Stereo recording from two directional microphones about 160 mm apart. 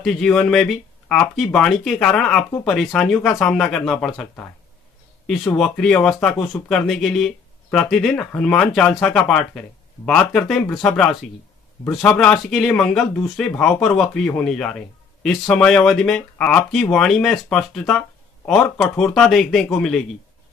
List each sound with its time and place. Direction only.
0.0 s speech: 5° left (ahead or behind)